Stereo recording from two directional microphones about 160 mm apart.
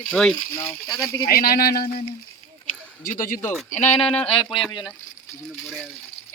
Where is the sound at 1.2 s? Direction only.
70° left (ahead or behind).